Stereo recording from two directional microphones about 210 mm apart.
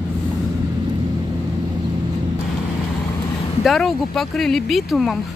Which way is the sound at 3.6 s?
Centre (ahead or behind).